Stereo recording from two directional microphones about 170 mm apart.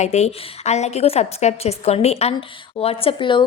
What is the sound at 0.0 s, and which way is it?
Speech, 40° left (ahead or behind).